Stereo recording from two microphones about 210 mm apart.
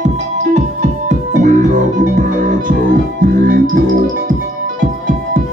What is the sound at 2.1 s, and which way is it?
Music, 40° right (ahead or behind).